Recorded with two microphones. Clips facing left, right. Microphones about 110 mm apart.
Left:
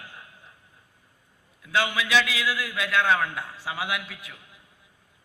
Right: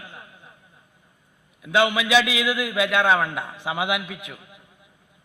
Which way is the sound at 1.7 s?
20° right (ahead or behind).